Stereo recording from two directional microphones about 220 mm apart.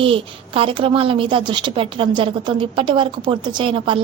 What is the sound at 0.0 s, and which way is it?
A woman's voice, 25° right (ahead or behind).